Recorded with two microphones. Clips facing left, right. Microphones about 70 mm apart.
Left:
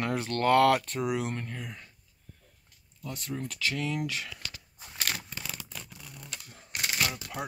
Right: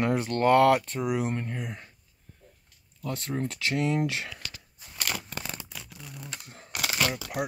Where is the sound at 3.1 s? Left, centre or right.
Right.